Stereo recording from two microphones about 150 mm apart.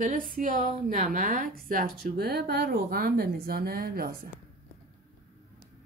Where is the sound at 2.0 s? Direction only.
90° right.